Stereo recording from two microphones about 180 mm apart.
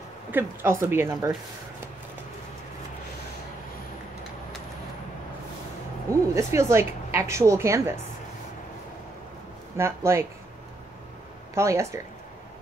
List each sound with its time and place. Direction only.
0.3 s a woman's voice: 10° right (ahead or behind)
6.3 s a woman's voice: 15° right (ahead or behind)
9.8 s a woman's voice: 15° right (ahead or behind)
11.5 s a woman's voice: 15° right (ahead or behind)